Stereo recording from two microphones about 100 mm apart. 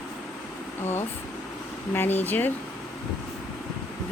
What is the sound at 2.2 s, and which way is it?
Speech, 20° left (ahead or behind).